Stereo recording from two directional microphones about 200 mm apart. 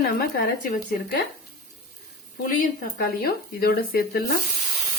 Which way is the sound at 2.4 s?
50° left (ahead or behind).